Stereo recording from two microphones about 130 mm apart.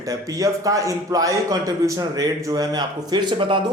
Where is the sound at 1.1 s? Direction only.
25° right (ahead or behind).